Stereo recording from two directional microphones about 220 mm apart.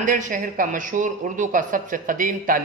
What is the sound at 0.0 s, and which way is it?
A man's voice, 35° right (ahead or behind).